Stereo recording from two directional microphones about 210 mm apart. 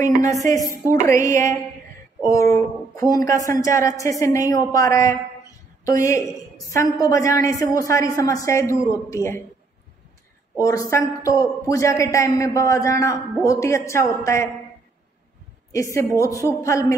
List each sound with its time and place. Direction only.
0.2 s a woman's voice: 15° left (ahead or behind)
10.6 s a woman's voice: 15° left (ahead or behind)
15.7 s a woman's voice: 15° left (ahead or behind)